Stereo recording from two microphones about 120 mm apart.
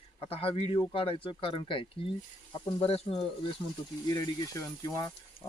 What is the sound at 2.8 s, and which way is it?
Speech, 55° left (ahead or behind).